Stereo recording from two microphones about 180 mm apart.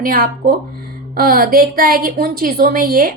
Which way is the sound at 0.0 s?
55° right (ahead or behind).